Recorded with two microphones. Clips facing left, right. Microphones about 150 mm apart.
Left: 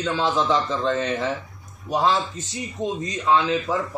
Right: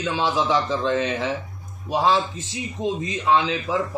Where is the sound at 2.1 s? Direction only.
90° right.